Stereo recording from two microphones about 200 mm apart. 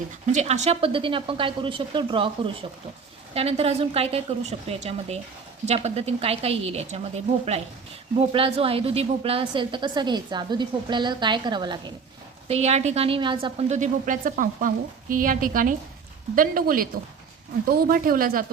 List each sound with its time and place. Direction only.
0.3 s a woman's voice: 35° right (ahead or behind)
8.2 s a woman's voice: 25° right (ahead or behind)
12.5 s a woman's voice: 30° right (ahead or behind)